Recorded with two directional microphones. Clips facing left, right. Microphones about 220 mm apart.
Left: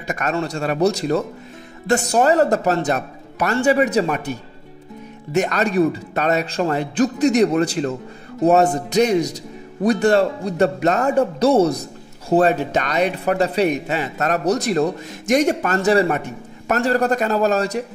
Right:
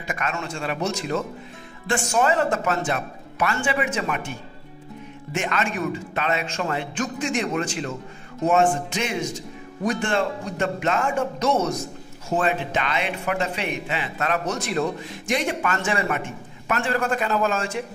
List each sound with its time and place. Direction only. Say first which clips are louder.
0.0 s speech: left 6 dB; 40° left (ahead or behind)